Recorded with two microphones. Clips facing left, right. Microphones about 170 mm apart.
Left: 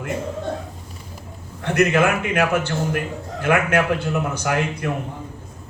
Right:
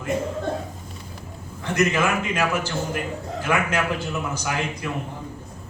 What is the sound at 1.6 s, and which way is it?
A man's voice, 60° left (ahead or behind).